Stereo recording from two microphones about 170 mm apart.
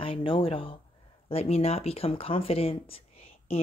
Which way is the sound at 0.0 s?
30° left (ahead or behind).